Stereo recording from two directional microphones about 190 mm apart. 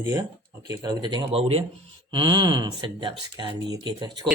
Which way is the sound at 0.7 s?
20° right (ahead or behind).